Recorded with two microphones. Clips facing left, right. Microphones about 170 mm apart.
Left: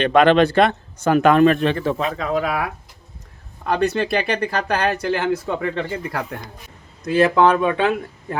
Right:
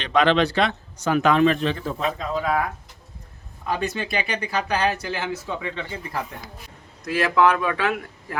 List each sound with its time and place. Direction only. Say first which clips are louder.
0.0 s speech: left 5 dB; 55° left (ahead or behind); by 2.7 s 90° left
3.7 s speech: left 7 dB; 65° left (ahead or behind)
6.1 s speech: left 3 dB; 70° left (ahead or behind)
7.0 s speech: left 4 dB; 30° left (ahead or behind)